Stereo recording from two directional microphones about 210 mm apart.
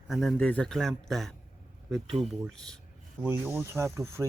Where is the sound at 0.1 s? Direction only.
Centre (ahead or behind).